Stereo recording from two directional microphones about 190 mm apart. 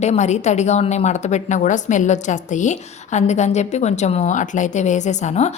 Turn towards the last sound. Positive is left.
turn(degrees=35)  # may be behind; listen again after turning